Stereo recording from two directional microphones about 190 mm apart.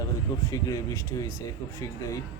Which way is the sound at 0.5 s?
15° left (ahead or behind).